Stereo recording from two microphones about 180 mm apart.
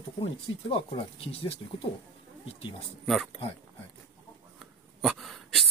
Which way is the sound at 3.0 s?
Centre (ahead or behind).